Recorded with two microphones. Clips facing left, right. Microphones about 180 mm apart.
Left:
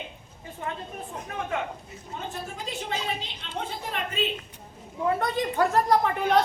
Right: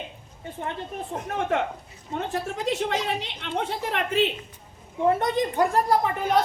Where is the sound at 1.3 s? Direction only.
65° right (ahead or behind).